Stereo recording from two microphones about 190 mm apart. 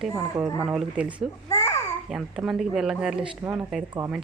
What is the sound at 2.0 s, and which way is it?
Speech, 5° right (ahead or behind).